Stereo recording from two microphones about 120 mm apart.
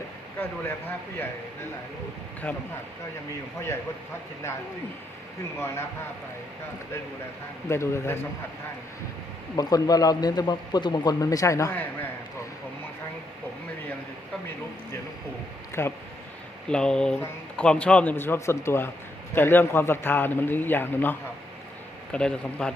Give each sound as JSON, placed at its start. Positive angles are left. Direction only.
{"t": 2.5, "sound": "a man's voice", "side_deg": 10}
{"t": 5.5, "sound": "a man's voice", "side_deg": 20}
{"t": 7.7, "sound": "a man's voice", "side_deg": 20}
{"t": 9.6, "sound": "speech", "side_deg": 30}
{"t": 15.8, "sound": "a man's voice", "side_deg": 20}
{"t": 16.6, "sound": "a man's voice", "side_deg": 5}